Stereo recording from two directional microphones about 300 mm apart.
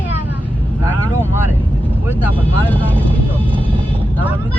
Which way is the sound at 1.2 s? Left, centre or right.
Centre.